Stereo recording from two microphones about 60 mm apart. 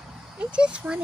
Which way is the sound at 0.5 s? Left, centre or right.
Centre.